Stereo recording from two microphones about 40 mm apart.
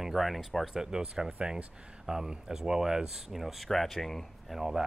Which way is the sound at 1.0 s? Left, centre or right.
Right.